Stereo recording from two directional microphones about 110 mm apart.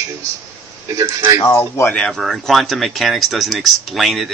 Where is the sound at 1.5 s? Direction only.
15° left (ahead or behind).